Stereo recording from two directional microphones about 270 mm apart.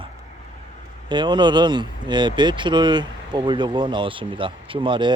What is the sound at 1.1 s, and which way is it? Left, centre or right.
Speech, centre.